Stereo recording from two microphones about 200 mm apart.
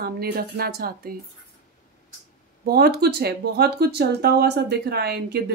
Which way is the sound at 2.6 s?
50° right (ahead or behind).